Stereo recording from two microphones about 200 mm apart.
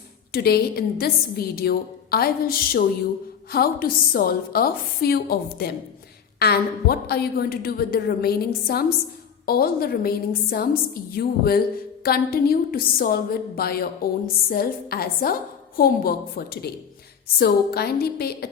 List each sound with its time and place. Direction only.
0.3 s a woman's voice: 50° left (ahead or behind)